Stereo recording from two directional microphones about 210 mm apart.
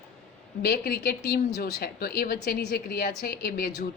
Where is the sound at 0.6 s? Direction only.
50° left (ahead or behind).